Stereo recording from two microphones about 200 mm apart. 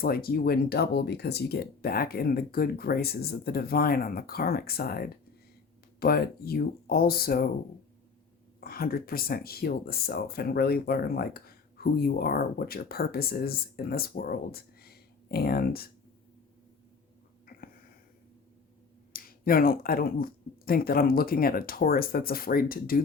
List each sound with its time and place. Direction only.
0.0 s speech: 50° left (ahead or behind)
8.6 s speech: 50° left (ahead or behind)
17.4 s a sound: 45° left (ahead or behind)
19.1 s speech: 45° left (ahead or behind)